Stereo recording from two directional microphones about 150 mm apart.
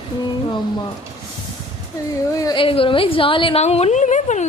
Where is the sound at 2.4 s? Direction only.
30° left (ahead or behind).